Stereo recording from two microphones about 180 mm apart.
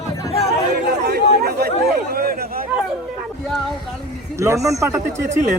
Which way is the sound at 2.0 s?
60° right (ahead or behind).